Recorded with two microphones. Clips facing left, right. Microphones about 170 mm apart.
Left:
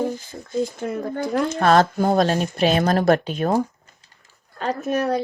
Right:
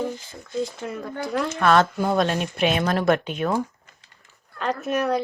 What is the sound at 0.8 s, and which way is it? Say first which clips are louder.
Speech: left 5 dB; 50° left (ahead or behind).